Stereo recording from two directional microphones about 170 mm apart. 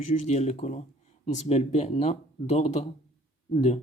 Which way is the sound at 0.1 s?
45° left (ahead or behind).